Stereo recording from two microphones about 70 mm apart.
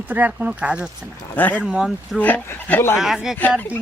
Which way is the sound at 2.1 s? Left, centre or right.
Left.